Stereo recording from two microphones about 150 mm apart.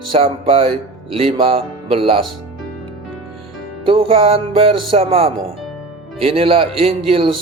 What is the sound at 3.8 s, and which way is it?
Speech, 40° right (ahead or behind).